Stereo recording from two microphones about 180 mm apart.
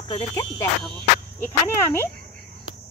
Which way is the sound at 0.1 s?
25° left (ahead or behind).